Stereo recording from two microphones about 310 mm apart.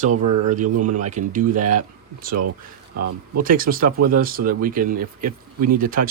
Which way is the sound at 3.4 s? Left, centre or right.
Right.